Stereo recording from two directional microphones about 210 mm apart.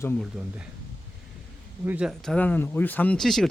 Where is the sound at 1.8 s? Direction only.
5° right (ahead or behind).